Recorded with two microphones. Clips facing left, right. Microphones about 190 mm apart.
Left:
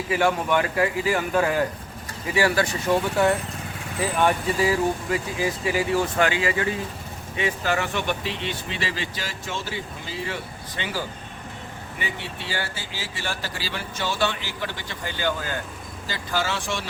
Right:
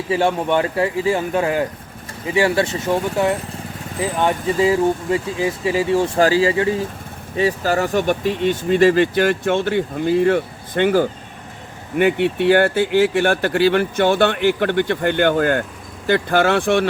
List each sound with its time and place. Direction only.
0.1 s speech: 30° right (ahead or behind); by 16.8 s 60° right (ahead or behind)